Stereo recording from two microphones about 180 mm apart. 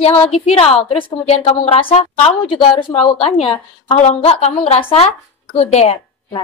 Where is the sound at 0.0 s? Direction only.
35° left (ahead or behind).